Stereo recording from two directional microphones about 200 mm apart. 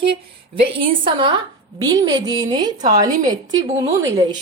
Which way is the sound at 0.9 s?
25° right (ahead or behind).